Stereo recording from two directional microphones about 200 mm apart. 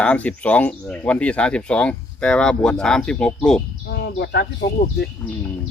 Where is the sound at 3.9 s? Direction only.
55° left (ahead or behind).